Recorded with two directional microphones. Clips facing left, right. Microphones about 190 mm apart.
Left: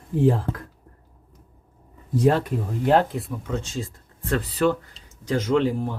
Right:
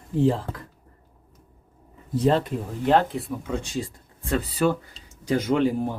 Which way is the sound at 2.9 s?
Centre (ahead or behind).